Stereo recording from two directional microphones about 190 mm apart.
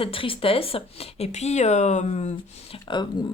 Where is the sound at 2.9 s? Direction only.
25° left (ahead or behind).